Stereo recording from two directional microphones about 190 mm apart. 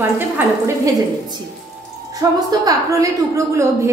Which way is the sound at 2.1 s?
20° right (ahead or behind).